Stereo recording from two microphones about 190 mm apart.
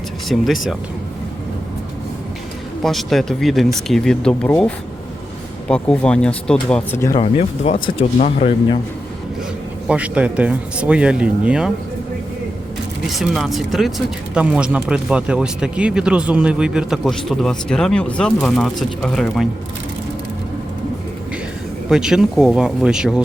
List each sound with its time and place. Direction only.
0.3 s speech: centre (ahead or behind)
2.8 s speech: centre (ahead or behind)
7.2 s speech: 30° left (ahead or behind)
9.8 s speech: 5° right (ahead or behind)
13.1 s speech: centre (ahead or behind)
21.8 s speech: 5° right (ahead or behind)